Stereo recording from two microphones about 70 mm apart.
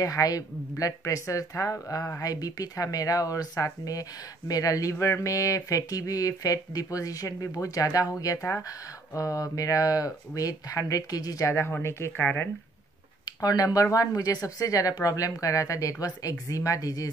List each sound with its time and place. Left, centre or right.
0.0 s speech: left
4.9 s speech: left
11.4 s speech: left
13.4 s speech: left